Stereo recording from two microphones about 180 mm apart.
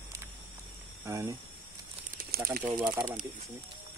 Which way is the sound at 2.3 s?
55° right (ahead or behind).